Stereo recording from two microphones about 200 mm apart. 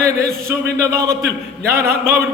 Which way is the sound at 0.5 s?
15° right (ahead or behind).